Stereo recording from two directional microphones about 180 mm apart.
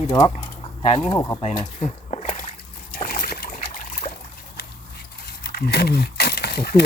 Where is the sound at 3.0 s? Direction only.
55° left (ahead or behind).